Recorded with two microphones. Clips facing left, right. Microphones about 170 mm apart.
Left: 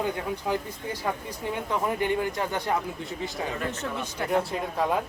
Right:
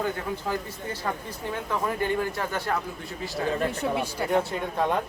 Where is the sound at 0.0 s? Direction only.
15° left (ahead or behind).